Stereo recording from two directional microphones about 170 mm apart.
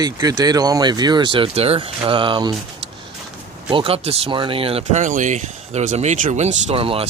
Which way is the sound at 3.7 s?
35° right (ahead or behind).